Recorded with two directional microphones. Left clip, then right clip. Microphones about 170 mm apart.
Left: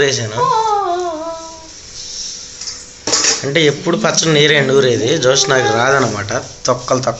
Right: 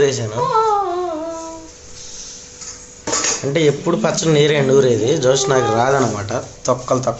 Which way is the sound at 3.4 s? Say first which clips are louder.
Right 1 dB; 10° right (ahead or behind).